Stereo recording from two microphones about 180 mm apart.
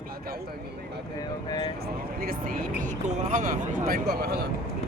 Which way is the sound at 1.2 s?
25° left (ahead or behind).